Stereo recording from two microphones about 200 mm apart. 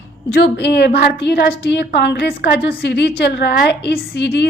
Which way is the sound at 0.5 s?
55° left (ahead or behind).